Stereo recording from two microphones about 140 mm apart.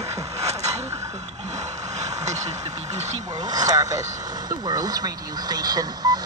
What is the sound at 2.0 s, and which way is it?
Vehicle, 55° right (ahead or behind).